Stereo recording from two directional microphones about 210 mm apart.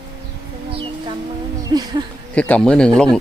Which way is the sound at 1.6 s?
20° right (ahead or behind).